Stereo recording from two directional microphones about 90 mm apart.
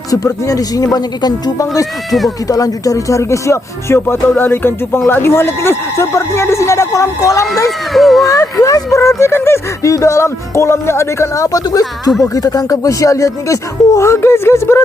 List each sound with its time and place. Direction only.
0.1 s speech: 40° left (ahead or behind)
2.0 s a child's voice: centre (ahead or behind)
2.5 s speech: 40° left (ahead or behind)
7.9 s a child's voice: centre (ahead or behind)
8.3 s speech: 40° left (ahead or behind)